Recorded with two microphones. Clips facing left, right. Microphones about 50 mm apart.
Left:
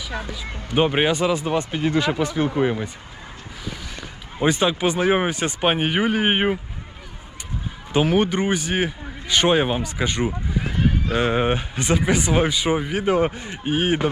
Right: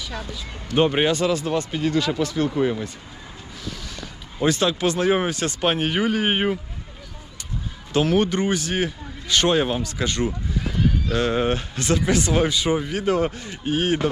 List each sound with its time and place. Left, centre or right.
0.1 s a man's voice: centre
4.0 s a man's voice: centre
7.9 s a man's voice: centre